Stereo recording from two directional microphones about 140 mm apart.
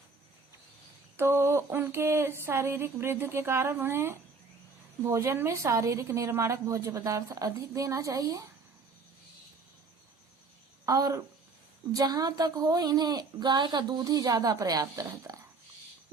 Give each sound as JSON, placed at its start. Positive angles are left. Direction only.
{"t": 1.1, "sound": "a sound", "side_deg": -20}
{"t": 5.0, "sound": "a woman's voice", "side_deg": -20}
{"t": 10.8, "sound": "a woman's voice", "side_deg": -25}